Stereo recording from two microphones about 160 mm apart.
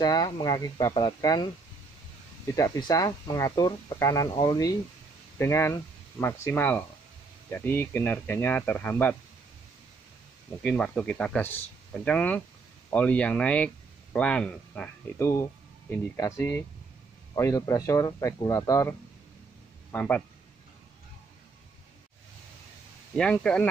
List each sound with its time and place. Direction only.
0.0 s speech: 25° left (ahead or behind)
2.5 s speech: 20° left (ahead or behind)
10.6 s speech: 5° left (ahead or behind)
23.1 s speech: 5° left (ahead or behind)